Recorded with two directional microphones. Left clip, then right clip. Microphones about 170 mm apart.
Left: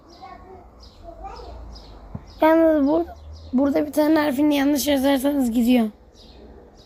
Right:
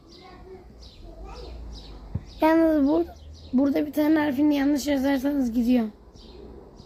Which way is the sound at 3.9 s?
40° left (ahead or behind).